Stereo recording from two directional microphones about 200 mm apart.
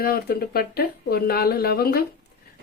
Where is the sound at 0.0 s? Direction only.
50° left (ahead or behind).